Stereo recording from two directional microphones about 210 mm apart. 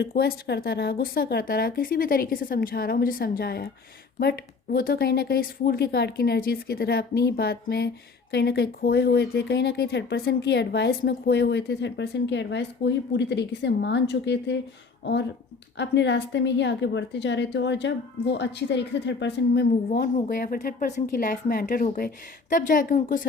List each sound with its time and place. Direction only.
0.0 s a woman's voice: 45° left (ahead or behind)